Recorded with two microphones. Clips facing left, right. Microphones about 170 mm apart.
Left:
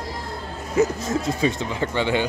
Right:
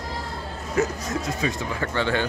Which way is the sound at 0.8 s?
20° left (ahead or behind).